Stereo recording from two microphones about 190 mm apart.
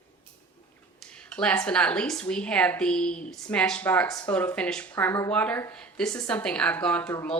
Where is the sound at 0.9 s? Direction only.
5° left (ahead or behind).